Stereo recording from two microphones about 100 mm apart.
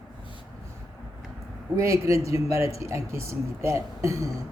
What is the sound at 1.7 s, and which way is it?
A man's voice, 30° right (ahead or behind).